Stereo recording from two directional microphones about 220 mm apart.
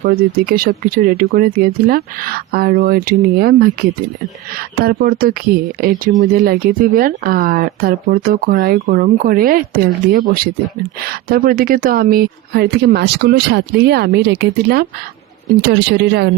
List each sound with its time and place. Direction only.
0.0 s speech: 40° right (ahead or behind)